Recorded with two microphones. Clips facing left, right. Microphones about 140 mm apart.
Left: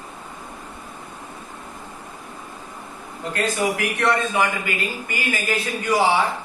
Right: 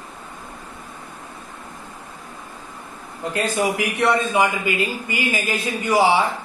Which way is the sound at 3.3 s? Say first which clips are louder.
Right 1 dB; 15° right (ahead or behind).